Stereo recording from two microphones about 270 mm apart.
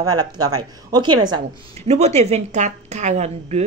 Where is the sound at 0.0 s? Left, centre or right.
Centre.